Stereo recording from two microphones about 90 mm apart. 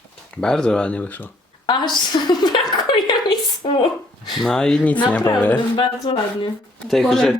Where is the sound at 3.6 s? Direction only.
65° left (ahead or behind).